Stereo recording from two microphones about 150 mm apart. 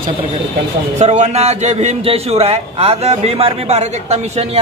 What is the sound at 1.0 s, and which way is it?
A man's voice, 50° right (ahead or behind).